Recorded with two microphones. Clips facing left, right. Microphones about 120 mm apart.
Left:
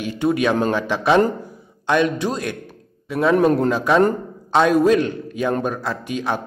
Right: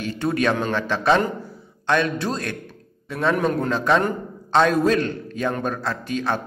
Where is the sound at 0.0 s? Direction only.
15° left (ahead or behind).